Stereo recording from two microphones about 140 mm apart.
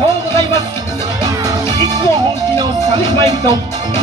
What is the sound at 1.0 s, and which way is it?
Music, 25° right (ahead or behind).